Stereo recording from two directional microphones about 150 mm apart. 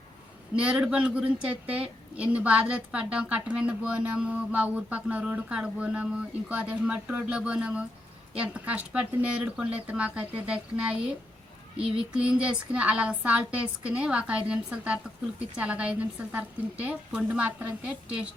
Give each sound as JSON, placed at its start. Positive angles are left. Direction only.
{"t": 0.5, "sound": "a woman's voice", "side_deg": -5}
{"t": 11.8, "sound": "a sound", "side_deg": -40}
{"t": 12.1, "sound": "a woman's voice", "side_deg": -5}